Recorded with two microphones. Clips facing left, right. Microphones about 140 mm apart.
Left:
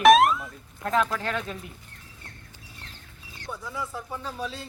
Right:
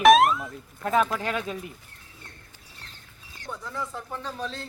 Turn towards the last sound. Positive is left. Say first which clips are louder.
# even
turn(degrees=5)  # may be behind; listen again after turning